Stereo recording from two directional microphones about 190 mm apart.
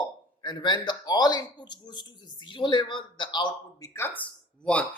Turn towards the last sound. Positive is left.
turn(degrees=5)  # may be behind; listen again after turning